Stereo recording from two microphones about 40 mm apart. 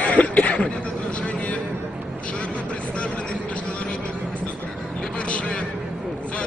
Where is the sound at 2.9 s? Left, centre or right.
Left.